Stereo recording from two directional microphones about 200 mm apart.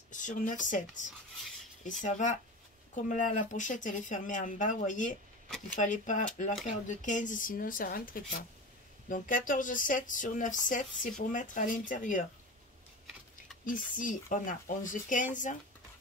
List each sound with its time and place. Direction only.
0.1 s speech: 40° left (ahead or behind)
13.7 s speech: 40° left (ahead or behind)